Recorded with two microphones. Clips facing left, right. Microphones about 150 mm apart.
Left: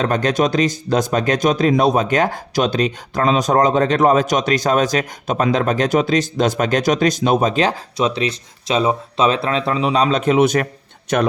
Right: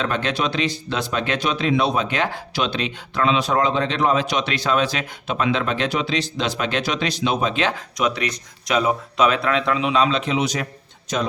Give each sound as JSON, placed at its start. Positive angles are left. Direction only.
{"t": 0.0, "sound": "a man's voice", "side_deg": 40}